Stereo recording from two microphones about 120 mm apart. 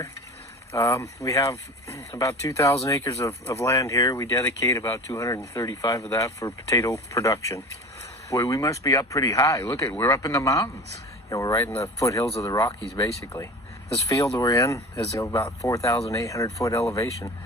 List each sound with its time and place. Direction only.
0.7 s speech: 25° left (ahead or behind)